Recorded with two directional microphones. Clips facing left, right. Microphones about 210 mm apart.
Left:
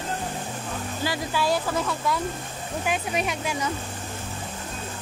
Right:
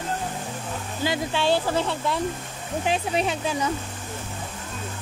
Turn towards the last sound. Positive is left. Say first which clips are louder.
# right 3 dB
turn(degrees=-30)  # may be behind; listen again after turning